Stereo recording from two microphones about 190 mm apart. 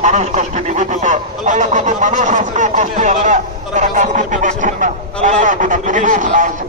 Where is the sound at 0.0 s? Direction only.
40° right (ahead or behind).